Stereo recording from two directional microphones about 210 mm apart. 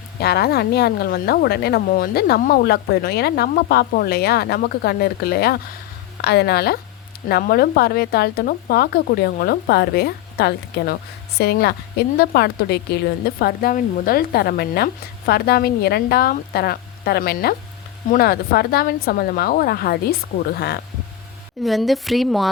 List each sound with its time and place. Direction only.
0.2 s a woman's voice: 50° left (ahead or behind)
21.6 s a woman's voice: centre (ahead or behind)